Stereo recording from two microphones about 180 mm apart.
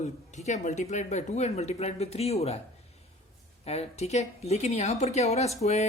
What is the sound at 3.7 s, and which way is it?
A man's voice, 35° left (ahead or behind).